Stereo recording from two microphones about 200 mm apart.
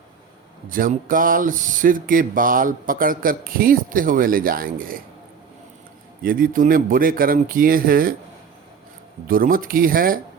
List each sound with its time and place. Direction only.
0.7 s speech: 45° right (ahead or behind)
6.2 s speech: 45° right (ahead or behind)
9.2 s speech: 45° right (ahead or behind)